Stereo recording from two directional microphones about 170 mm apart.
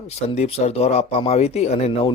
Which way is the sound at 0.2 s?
40° left (ahead or behind).